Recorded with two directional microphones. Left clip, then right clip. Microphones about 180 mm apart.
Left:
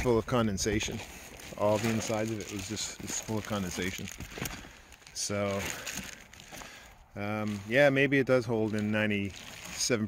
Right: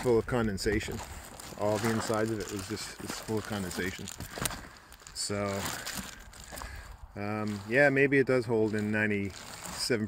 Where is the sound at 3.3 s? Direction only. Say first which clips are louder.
Right 1 dB; 25° left (ahead or behind).